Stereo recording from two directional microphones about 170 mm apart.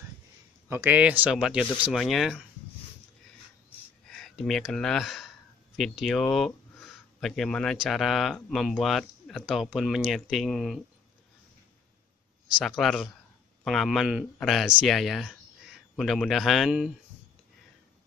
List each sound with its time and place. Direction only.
0.7 s speech: 15° right (ahead or behind)
4.2 s speech: centre (ahead or behind)
12.5 s speech: centre (ahead or behind)